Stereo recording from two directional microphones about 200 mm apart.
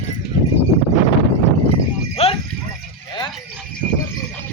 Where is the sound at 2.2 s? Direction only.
30° left (ahead or behind).